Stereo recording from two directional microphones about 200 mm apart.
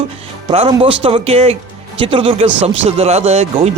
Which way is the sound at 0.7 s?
25° right (ahead or behind).